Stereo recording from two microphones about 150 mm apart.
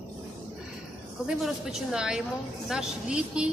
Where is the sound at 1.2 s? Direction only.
5° right (ahead or behind).